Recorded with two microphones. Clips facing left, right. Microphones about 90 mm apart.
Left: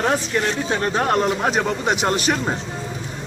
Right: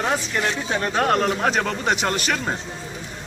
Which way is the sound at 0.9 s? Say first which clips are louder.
Even; 15° left (ahead or behind).